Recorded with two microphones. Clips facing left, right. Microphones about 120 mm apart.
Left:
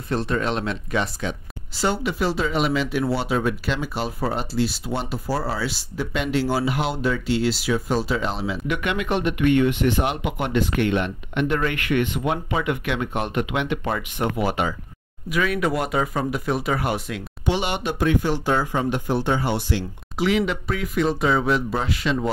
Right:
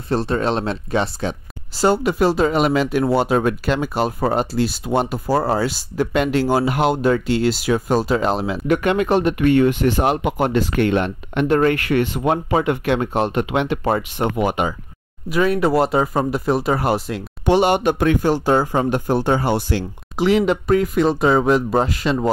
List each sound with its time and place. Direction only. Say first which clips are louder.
0.1 s speech: right 4 dB; 35° right (ahead or behind)
1.8 s speech: right 7 dB; 45° right (ahead or behind); by 14.8 s 20° right (ahead or behind)
15.2 s speech: right 5 dB; 35° right (ahead or behind)